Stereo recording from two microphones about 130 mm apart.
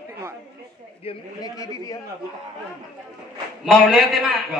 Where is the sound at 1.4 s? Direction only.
25° left (ahead or behind).